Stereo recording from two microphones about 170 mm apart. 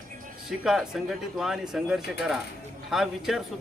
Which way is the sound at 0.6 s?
Centre (ahead or behind).